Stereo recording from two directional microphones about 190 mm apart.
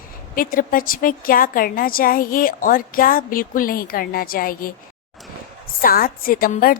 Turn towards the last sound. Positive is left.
turn(degrees=50)  # may be behind; listen again after turning